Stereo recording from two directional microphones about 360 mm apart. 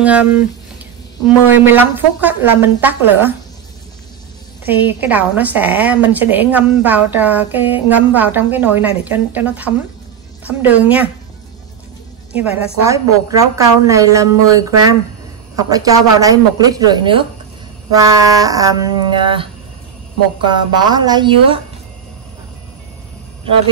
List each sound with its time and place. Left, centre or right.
0.0 s a woman's voice: centre
1.5 s a woman's voice: centre
4.6 s a woman's voice: centre
12.4 s a woman's voice: centre
18.2 s a woman's voice: centre